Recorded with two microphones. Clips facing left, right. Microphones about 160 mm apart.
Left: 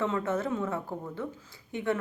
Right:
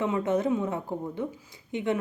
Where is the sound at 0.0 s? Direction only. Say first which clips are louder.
Right 4 dB; 15° right (ahead or behind).